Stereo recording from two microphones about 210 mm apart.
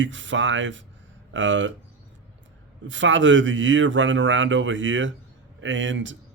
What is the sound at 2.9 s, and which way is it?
Speech, 60° right (ahead or behind).